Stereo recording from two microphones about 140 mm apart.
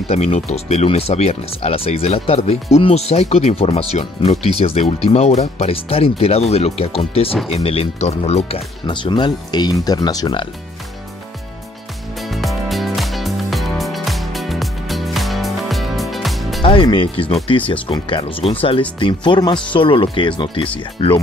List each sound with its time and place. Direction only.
0.1 s speech: 50° left (ahead or behind); by 10.5 s 30° left (ahead or behind)
12.2 s music: centre (ahead or behind)
16.6 s speech: 35° left (ahead or behind)